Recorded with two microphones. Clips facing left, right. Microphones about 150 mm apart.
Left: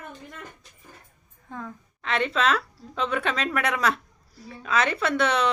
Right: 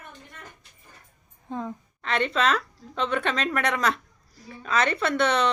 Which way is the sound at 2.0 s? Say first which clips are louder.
Even; centre (ahead or behind).